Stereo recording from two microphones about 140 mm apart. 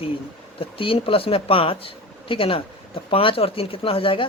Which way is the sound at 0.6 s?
40° left (ahead or behind).